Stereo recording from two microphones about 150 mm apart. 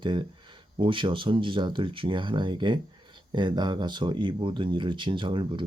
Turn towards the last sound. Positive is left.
turn(degrees=-30)  # may be behind; listen again after turning